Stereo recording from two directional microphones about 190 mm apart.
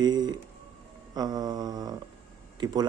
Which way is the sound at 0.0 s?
20° right (ahead or behind).